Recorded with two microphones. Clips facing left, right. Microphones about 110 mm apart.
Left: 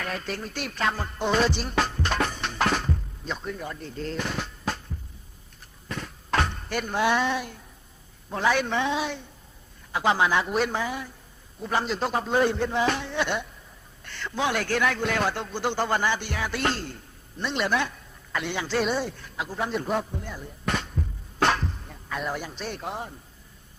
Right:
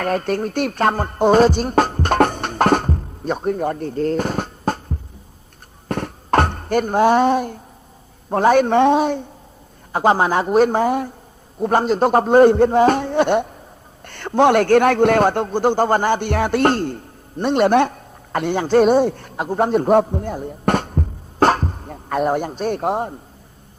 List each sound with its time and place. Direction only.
0.0 s music: 50° right (ahead or behind)
5.9 s a sound: 55° right (ahead or behind)
8.3 s a man's voice: 50° right (ahead or behind)